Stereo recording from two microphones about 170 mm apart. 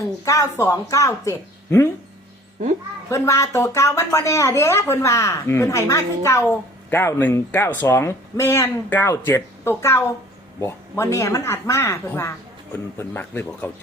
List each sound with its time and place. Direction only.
0.6 s speech: 20° left (ahead or behind)
3.1 s a woman's voice: 15° left (ahead or behind)